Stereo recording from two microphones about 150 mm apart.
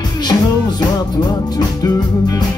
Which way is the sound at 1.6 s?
25° left (ahead or behind).